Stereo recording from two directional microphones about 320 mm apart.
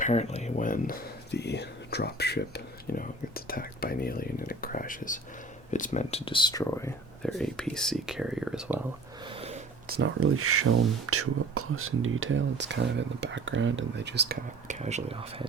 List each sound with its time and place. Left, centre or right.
0.0 s speech: left; by 8.8 s centre
9.2 s a sound: centre
10.0 s speech: right; by 15.4 s centre